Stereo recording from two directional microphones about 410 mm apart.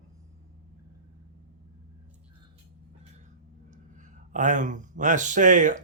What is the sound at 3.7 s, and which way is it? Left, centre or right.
Speech, centre.